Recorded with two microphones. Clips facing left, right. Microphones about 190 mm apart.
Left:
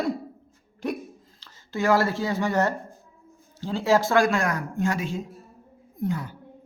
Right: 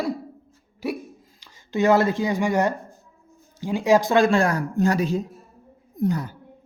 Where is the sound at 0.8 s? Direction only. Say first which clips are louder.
Right 1 dB; 5° right (ahead or behind).